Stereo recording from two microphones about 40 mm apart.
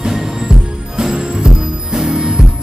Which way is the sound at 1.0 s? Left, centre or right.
Centre.